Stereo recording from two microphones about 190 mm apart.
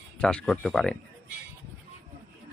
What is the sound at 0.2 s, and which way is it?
Speech, 5° left (ahead or behind).